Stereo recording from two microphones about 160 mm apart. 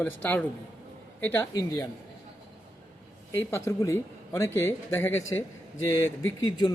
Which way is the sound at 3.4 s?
15° left (ahead or behind).